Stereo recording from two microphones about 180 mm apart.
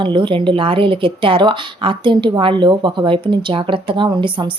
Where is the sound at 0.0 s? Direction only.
25° right (ahead or behind).